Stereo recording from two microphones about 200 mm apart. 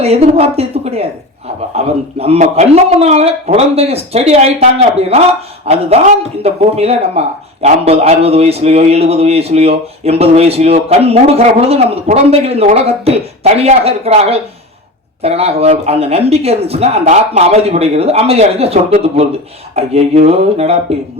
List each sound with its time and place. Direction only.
0.0 s a man's voice: 30° right (ahead or behind)